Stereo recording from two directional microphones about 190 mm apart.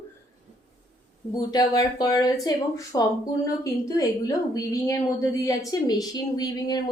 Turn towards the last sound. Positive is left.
turn(degrees=20)  # may be behind; listen again after turning